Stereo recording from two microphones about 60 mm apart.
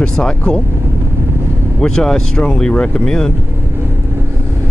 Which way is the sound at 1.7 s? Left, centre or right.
Centre.